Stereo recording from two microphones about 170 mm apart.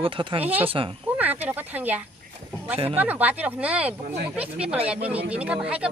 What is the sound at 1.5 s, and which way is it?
Speech, 10° right (ahead or behind).